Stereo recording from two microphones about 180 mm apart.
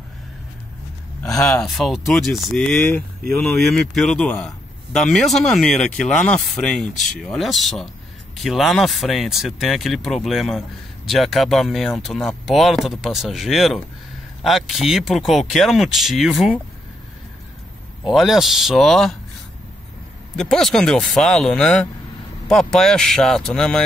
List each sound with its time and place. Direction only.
1.4 s speech: 5° left (ahead or behind)
18.1 s speech: centre (ahead or behind)
20.3 s speech: centre (ahead or behind)